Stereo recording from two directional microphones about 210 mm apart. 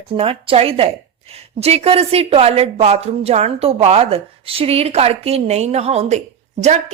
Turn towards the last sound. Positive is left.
turn(degrees=-30)  # may be behind; listen again after turning